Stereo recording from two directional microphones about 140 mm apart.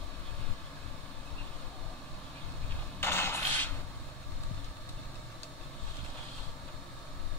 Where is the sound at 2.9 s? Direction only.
15° left (ahead or behind).